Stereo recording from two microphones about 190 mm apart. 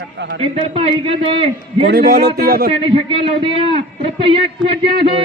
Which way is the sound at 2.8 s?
30° right (ahead or behind).